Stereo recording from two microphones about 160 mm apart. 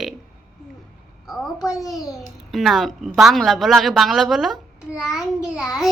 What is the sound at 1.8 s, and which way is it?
Speech, 20° left (ahead or behind).